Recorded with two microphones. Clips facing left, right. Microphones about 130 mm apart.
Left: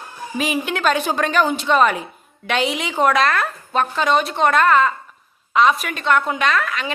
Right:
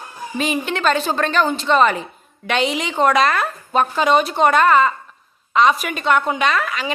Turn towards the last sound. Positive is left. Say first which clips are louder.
# right 1 dB
turn(degrees=0)  # may be behind; listen again after turning